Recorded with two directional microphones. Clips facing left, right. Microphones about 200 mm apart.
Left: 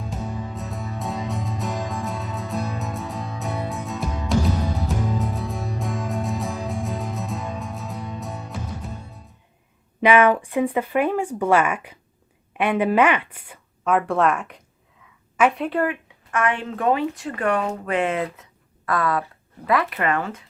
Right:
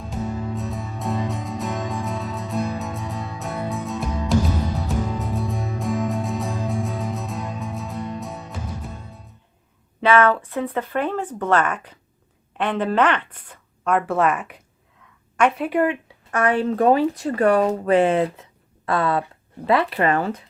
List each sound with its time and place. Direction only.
0.0 s music: centre (ahead or behind)
10.0 s speech: 15° left (ahead or behind)
15.7 s speech: 20° right (ahead or behind)
16.0 s speech: 35° right (ahead or behind)